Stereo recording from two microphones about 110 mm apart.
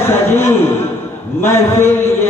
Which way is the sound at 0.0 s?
20° left (ahead or behind).